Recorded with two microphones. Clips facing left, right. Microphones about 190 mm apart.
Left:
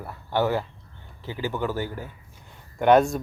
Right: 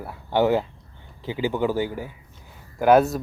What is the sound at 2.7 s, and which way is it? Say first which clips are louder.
Speech: right 1 dB; 5° right (ahead or behind).